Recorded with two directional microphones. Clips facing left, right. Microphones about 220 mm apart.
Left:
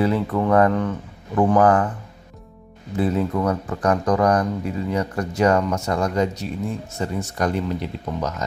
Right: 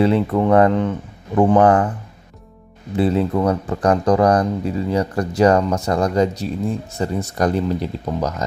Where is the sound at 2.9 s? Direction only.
30° right (ahead or behind).